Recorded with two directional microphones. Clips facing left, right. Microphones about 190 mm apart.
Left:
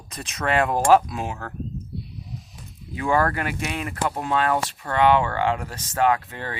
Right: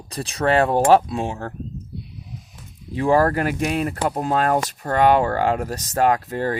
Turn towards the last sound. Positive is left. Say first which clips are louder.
# right 3 dB
turn(degrees=-40)  # may be behind; listen again after turning